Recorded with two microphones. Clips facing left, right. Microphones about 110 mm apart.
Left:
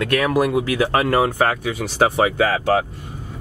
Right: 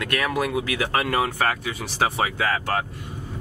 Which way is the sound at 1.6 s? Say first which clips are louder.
Left 6 dB; 45° left (ahead or behind).